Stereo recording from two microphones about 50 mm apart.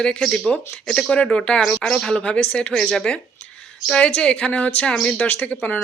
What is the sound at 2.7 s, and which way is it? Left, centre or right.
Speech, centre.